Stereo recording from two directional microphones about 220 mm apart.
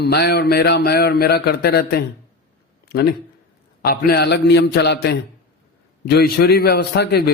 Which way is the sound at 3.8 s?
45° left (ahead or behind).